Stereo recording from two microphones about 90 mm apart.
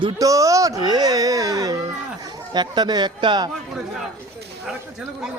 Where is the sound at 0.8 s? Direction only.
50° right (ahead or behind).